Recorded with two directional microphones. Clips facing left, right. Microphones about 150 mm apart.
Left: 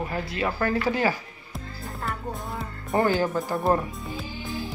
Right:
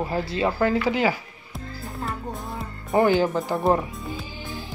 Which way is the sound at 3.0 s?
20° right (ahead or behind).